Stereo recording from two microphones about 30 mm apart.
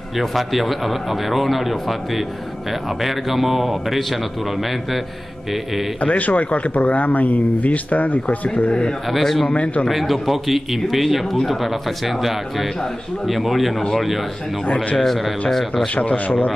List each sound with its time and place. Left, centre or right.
0.2 s speech: centre
5.9 s speech: left
9.1 s a man's voice: centre
9.5 s speech: left
9.8 s speech: centre
15.0 s a man's voice: centre
15.9 s speech: left